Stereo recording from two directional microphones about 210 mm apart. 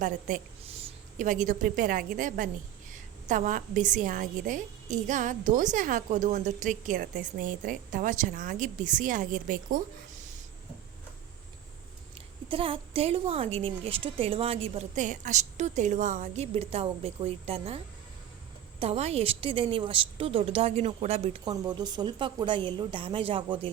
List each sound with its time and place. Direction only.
0.0 s a woman's voice: 40° right (ahead or behind)
12.1 s a woman's voice: 25° right (ahead or behind)
21.5 s a woman's voice: 20° right (ahead or behind)